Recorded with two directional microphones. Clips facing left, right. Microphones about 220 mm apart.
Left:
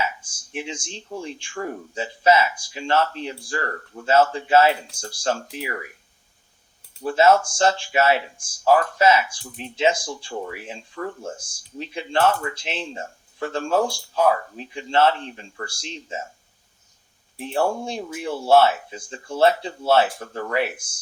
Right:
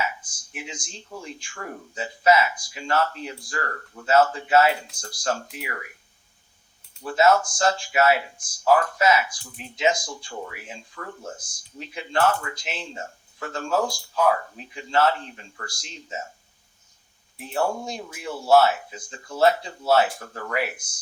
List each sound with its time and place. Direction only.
0.2 s speech: 30° left (ahead or behind)
7.0 s speech: 30° left (ahead or behind)
17.3 s speech: 30° left (ahead or behind)